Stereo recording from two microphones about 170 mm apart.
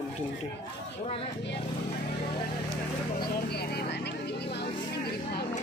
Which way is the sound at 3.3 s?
70° left (ahead or behind).